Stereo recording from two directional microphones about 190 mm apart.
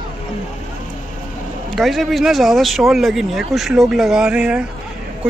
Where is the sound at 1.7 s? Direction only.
Centre (ahead or behind).